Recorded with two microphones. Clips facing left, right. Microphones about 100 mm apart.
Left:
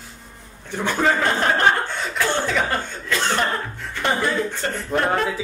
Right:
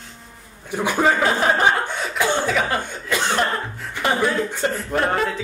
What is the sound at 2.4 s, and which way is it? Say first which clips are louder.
Speech: right 1 dB; centre (ahead or behind).